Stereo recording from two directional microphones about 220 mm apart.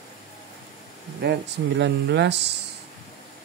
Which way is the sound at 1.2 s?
50° right (ahead or behind).